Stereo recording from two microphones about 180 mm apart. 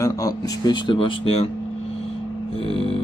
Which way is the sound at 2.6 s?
30° left (ahead or behind).